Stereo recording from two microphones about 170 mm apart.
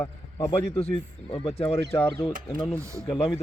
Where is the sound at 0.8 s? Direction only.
35° left (ahead or behind).